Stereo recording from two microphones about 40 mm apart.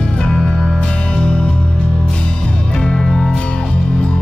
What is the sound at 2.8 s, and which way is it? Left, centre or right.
Music, centre.